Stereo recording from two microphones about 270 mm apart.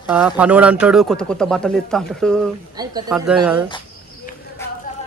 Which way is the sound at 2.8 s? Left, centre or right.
Centre.